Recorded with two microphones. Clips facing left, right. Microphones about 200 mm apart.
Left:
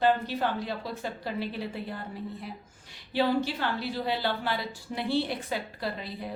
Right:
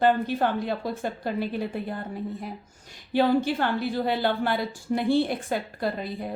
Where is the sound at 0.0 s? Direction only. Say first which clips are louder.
Right 3 dB; 50° right (ahead or behind).